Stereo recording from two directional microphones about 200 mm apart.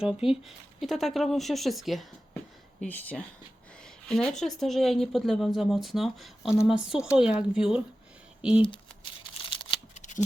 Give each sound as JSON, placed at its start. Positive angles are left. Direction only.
{"t": 0.0, "sound": "speech", "side_deg": -5}
{"t": 8.7, "sound": "tearing", "side_deg": 25}
{"t": 9.9, "sound": "shuffling cards", "side_deg": 35}